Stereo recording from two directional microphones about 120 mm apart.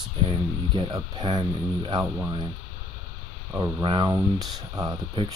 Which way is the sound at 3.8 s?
40° right (ahead or behind).